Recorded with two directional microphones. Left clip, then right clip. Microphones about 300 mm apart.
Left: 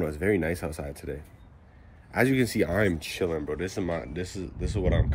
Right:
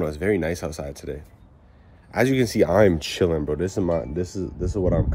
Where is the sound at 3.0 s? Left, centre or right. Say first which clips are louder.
Right 7 dB; right; by 4.8 s centre.